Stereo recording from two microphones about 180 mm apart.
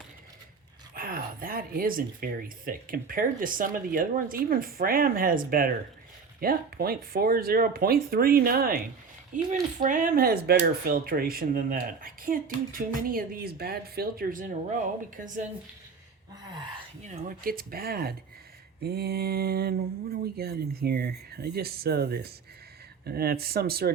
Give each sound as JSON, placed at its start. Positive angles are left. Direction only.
{"t": 0.9, "sound": "speech", "side_deg": -50}
{"t": 17.1, "sound": "speech", "side_deg": -50}